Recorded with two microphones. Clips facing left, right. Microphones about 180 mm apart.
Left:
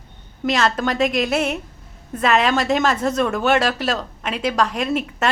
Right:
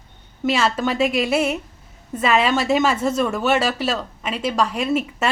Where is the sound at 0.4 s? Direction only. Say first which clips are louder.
Even; 5° right (ahead or behind).